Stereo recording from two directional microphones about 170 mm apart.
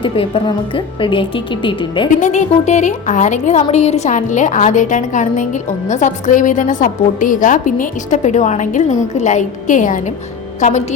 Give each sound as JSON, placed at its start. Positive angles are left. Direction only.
{"t": 0.0, "sound": "a woman's voice", "side_deg": 30}
{"t": 2.2, "sound": "a woman's voice", "side_deg": 45}